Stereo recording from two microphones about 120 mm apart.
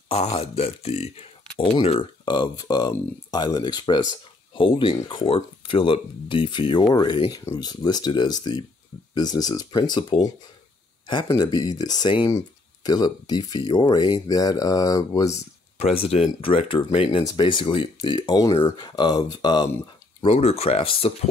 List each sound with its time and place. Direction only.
0.1 s speech: 55° left (ahead or behind)
1.6 s speech: 45° left (ahead or behind)
4.6 s speech: 45° left (ahead or behind); by 15.4 s 30° left (ahead or behind)
15.8 s speech: 60° left (ahead or behind); by 19.7 s 35° left (ahead or behind)
20.2 s speech: 55° left (ahead or behind)